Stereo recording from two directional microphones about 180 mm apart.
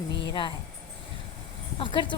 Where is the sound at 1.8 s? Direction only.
25° left (ahead or behind).